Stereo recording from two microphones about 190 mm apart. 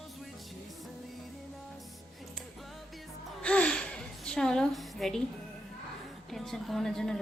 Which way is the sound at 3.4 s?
5° left (ahead or behind).